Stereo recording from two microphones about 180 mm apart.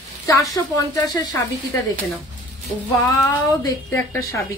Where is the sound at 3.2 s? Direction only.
20° left (ahead or behind).